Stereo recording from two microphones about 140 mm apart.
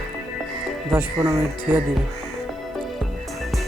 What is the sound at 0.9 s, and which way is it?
Speech, 15° right (ahead or behind).